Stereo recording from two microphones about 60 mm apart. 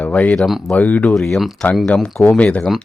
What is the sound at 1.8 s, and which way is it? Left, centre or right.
Speech, centre.